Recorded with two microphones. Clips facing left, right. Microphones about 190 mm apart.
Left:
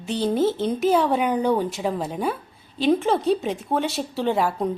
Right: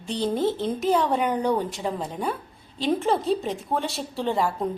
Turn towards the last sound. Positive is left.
turn(degrees=5)  # may be behind; listen again after turning